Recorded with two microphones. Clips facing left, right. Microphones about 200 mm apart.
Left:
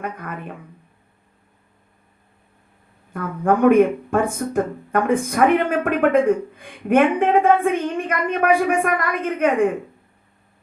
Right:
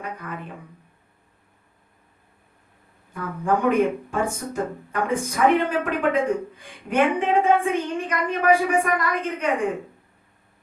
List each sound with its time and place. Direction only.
0.0 s speech: 55° left (ahead or behind)
3.1 s speech: 55° left (ahead or behind)